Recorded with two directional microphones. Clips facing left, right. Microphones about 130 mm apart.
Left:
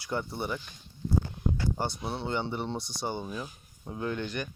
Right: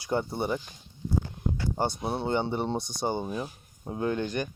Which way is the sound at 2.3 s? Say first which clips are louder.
Right 4 dB; 50° right (ahead or behind).